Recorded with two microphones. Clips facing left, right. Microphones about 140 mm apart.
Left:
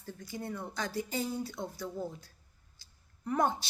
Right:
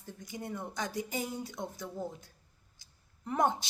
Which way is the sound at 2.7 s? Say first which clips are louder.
Even; 20° right (ahead or behind).